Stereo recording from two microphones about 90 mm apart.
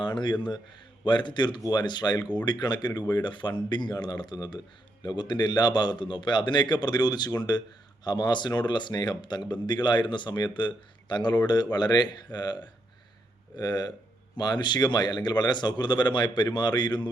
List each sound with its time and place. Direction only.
0.0 s speech: 60° left (ahead or behind)